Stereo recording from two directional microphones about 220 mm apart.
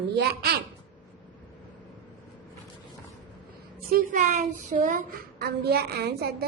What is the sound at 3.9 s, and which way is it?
A woman's voice, 40° right (ahead or behind).